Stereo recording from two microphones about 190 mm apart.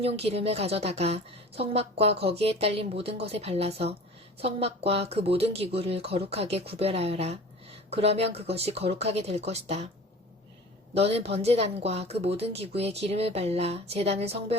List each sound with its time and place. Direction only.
0.0 s speech: 30° right (ahead or behind)
10.9 s speech: 30° right (ahead or behind)